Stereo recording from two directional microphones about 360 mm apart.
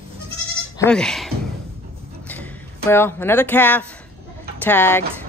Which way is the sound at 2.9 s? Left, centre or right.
Centre.